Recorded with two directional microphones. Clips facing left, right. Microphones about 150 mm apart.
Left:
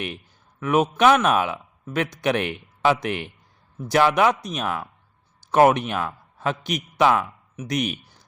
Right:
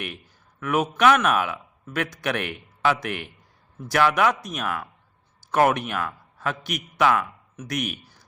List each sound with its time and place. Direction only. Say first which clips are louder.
0.6 s a man's voice: left 2 dB; 20° left (ahead or behind)
7.5 s speech: left 4 dB; 10° left (ahead or behind)